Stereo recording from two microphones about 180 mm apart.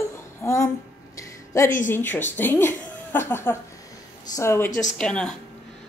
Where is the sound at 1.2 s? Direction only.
15° left (ahead or behind).